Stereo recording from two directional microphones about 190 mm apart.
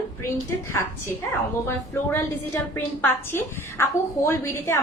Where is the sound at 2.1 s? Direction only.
15° left (ahead or behind).